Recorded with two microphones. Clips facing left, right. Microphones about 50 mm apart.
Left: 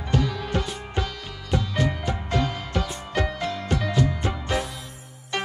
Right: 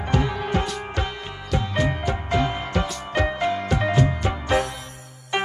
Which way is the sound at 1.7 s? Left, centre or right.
Centre.